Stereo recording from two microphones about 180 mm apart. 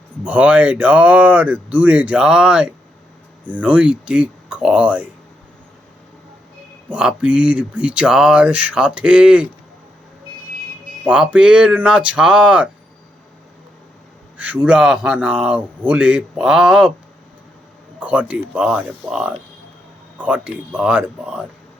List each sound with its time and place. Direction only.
0.3 s speech: 5° right (ahead or behind)
6.8 s speech: 5° right (ahead or behind)
11.0 s speech: 5° right (ahead or behind)
14.3 s speech: 10° right (ahead or behind)
18.0 s speech: 5° right (ahead or behind)